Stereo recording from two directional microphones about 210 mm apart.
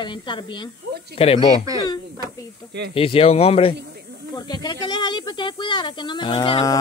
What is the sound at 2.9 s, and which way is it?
Speech, 25° left (ahead or behind).